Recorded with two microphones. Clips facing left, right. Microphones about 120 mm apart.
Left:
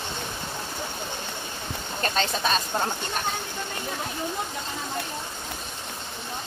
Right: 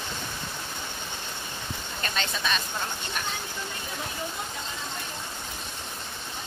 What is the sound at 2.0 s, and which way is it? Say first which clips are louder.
Speech: left 6 dB; 40° left (ahead or behind).